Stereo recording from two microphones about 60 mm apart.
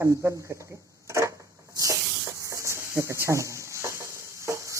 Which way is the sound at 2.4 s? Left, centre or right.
Right.